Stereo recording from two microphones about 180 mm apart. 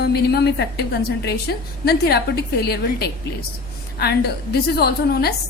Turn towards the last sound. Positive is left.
turn(degrees=60)  # may be behind; listen again after turning